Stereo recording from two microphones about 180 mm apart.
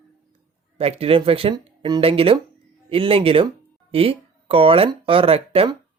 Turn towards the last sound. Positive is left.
turn(degrees=-30)  # may be behind; listen again after turning